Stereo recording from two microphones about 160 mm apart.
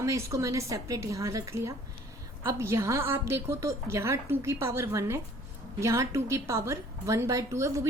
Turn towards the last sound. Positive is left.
turn(degrees=-20)  # may be behind; listen again after turning